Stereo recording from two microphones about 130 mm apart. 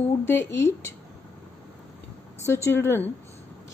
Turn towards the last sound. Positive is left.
turn(degrees=20)  # may be behind; listen again after turning